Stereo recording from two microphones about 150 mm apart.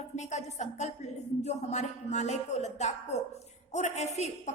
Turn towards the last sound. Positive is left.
turn(degrees=50)  # may be behind; listen again after turning